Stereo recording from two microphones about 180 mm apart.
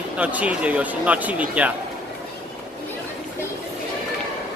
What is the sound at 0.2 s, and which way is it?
Speech, 5° right (ahead or behind).